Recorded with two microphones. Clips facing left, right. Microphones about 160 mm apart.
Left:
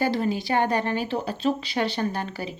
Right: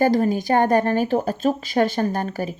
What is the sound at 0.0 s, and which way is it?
Speech, 45° right (ahead or behind).